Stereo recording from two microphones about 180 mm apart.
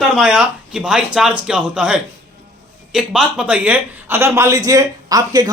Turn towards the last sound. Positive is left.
turn(degrees=-20)  # may be behind; listen again after turning